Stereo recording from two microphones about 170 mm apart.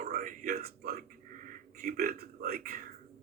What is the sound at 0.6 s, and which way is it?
A man's voice, 60° right (ahead or behind).